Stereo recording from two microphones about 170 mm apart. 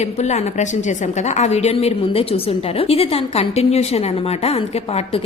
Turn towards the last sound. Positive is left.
turn(degrees=35)  # may be behind; listen again after turning